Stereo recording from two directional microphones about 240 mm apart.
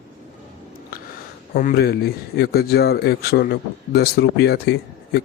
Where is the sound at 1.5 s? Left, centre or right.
Left.